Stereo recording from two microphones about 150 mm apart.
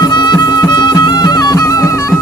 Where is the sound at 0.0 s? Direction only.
25° left (ahead or behind).